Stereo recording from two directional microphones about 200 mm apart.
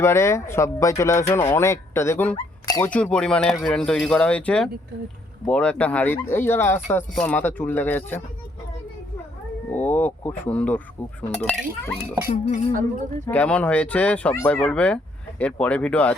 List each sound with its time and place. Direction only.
0.0 s speech: 15° left (ahead or behind)
2.3 s dog: 20° left (ahead or behind)
2.9 s speech: 5° left (ahead or behind)
9.6 s speech: 10° left (ahead or behind)
12.0 s speech: 10° right (ahead or behind)
12.7 s speech: 40° right (ahead or behind)
13.2 s speech: 10° left (ahead or behind)